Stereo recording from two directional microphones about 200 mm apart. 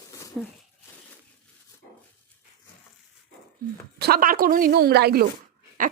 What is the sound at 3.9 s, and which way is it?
A woman's voice, 50° right (ahead or behind).